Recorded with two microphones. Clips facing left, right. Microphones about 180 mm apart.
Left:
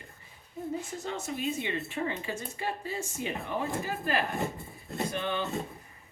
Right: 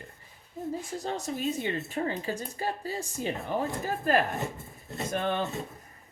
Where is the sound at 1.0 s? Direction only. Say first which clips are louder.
Right 2 dB; 35° right (ahead or behind).